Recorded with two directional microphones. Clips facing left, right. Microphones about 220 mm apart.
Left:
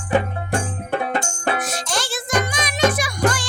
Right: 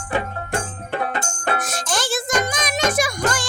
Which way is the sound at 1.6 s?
50° right (ahead or behind).